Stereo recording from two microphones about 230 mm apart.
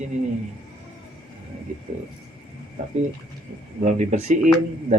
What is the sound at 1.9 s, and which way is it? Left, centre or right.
Speech, right.